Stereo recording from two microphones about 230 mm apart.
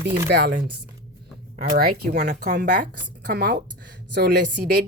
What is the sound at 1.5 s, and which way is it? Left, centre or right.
A woman's voice, right.